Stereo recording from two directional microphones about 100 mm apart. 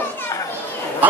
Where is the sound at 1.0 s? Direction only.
15° right (ahead or behind).